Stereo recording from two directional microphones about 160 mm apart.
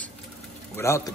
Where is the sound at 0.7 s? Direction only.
15° left (ahead or behind).